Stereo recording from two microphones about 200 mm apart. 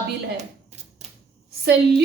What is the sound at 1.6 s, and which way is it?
Speech, 55° right (ahead or behind).